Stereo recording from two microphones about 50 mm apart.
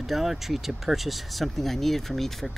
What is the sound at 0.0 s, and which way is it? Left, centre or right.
Speech, centre.